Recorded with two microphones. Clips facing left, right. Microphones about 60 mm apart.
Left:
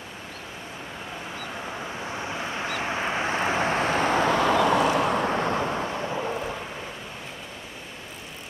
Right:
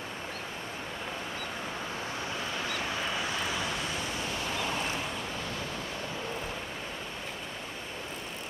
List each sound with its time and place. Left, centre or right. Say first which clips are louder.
1.7 s vehicle: left 3 dB; left